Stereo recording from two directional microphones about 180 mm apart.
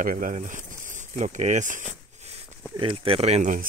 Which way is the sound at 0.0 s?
45° right (ahead or behind).